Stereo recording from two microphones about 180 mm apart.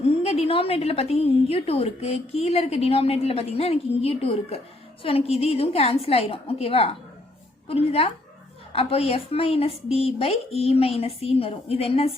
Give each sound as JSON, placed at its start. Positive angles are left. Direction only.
{"t": 0.1, "sound": "a woman's voice", "side_deg": 35}